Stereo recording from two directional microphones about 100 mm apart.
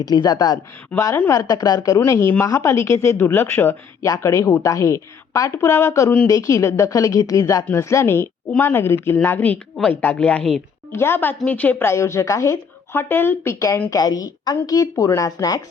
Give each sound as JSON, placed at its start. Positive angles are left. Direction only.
{"t": 0.0, "sound": "a woman's voice", "side_deg": 40}
{"t": 2.0, "sound": "a woman's voice", "side_deg": 25}
{"t": 4.0, "sound": "a woman's voice", "side_deg": 30}
{"t": 10.9, "sound": "a woman's voice", "side_deg": 25}